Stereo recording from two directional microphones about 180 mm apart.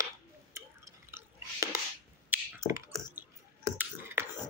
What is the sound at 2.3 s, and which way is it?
Clicking, 15° right (ahead or behind).